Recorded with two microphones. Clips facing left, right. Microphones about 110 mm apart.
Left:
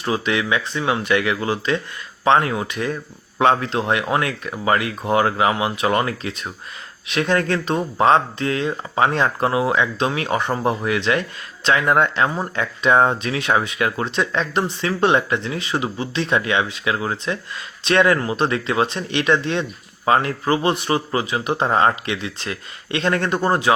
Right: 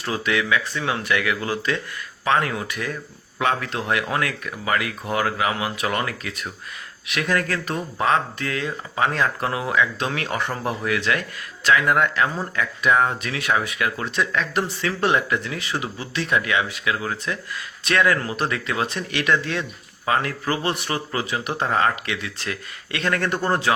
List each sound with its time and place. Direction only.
0.0 s speech: 20° left (ahead or behind)